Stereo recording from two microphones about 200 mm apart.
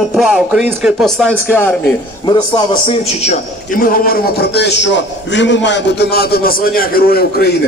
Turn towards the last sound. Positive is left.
turn(degrees=50)  # may be behind; listen again after turning